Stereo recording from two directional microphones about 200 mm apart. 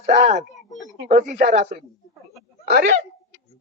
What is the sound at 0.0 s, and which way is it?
Speech, 35° right (ahead or behind).